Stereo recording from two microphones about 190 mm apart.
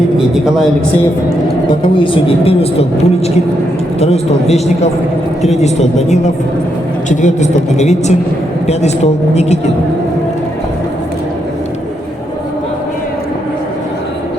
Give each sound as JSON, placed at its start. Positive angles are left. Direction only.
{"t": 0.2, "sound": "a man's voice", "side_deg": 0}
{"t": 2.0, "sound": "a woman's voice", "side_deg": 30}
{"t": 4.0, "sound": "a woman's voice", "side_deg": 35}
{"t": 9.3, "sound": "a woman's voice", "side_deg": 35}